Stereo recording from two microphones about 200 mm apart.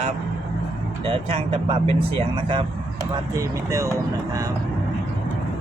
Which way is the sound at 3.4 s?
15° right (ahead or behind).